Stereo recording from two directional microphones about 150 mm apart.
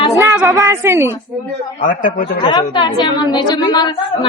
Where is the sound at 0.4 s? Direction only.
20° right (ahead or behind).